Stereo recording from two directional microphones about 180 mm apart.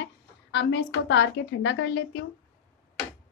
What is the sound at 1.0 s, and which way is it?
A woman's voice, 85° left.